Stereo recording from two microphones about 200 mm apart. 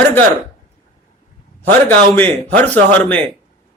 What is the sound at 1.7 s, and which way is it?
Speech, 10° left (ahead or behind).